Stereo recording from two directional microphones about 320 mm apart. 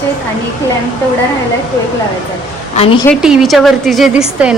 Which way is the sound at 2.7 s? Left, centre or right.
Centre.